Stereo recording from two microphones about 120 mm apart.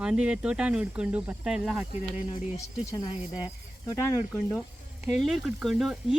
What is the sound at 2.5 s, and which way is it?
Speech, 30° left (ahead or behind).